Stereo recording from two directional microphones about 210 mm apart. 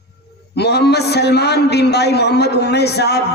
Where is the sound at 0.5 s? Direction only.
50° left (ahead or behind).